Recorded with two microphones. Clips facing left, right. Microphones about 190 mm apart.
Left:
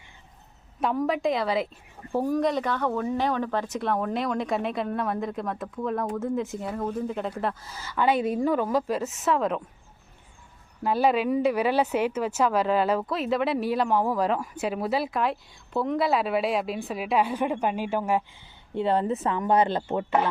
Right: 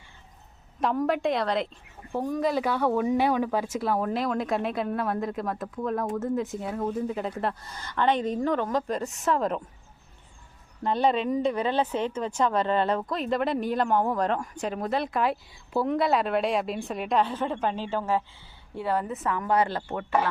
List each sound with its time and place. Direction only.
0.8 s speech: centre (ahead or behind)
2.4 s speech: 5° right (ahead or behind)
10.8 s speech: 5° left (ahead or behind)
18.7 s speech: 25° left (ahead or behind)